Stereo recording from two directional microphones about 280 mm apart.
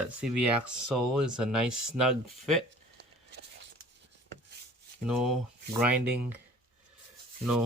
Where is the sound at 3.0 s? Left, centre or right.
Right.